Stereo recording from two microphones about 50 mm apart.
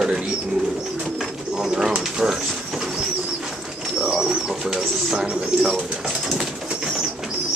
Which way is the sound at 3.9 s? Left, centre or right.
Centre.